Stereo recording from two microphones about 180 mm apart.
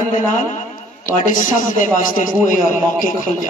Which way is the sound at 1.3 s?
45° left (ahead or behind).